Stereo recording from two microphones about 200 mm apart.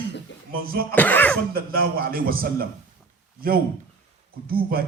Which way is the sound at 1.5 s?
50° right (ahead or behind).